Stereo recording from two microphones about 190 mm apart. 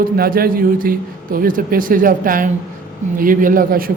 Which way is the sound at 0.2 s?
50° right (ahead or behind).